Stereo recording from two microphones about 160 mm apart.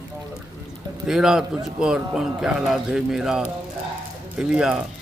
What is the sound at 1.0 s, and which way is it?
A man's voice, 5° right (ahead or behind).